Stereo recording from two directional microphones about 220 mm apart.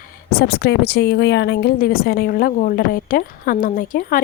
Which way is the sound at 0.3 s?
45° left (ahead or behind).